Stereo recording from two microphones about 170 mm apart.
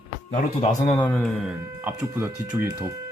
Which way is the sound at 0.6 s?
35° left (ahead or behind).